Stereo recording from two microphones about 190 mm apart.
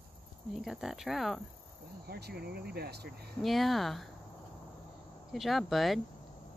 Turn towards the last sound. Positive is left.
turn(degrees=0)  # may be behind; listen again after turning